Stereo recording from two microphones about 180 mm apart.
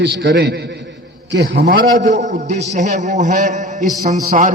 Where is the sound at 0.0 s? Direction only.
70° right (ahead or behind).